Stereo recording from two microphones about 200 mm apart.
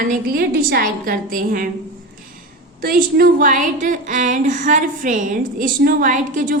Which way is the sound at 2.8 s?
45° right (ahead or behind).